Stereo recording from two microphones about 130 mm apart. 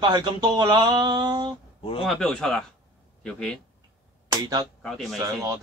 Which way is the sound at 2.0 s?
5° left (ahead or behind).